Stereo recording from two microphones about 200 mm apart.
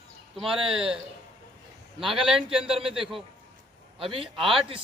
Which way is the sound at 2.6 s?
30° right (ahead or behind).